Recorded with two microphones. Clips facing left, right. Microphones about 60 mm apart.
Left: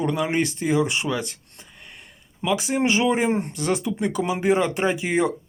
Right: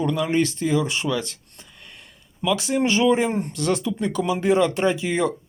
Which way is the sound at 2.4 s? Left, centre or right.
Left.